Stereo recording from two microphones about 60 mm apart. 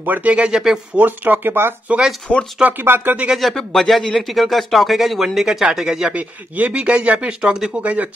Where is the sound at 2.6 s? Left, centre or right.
Right.